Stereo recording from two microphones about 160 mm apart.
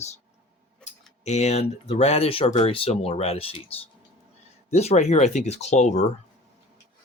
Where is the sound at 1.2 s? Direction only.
45° left (ahead or behind).